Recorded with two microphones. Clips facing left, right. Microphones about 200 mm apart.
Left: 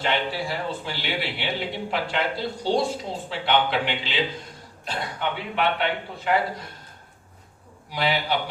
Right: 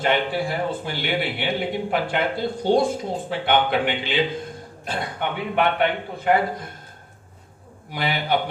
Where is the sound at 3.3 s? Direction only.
50° right (ahead or behind).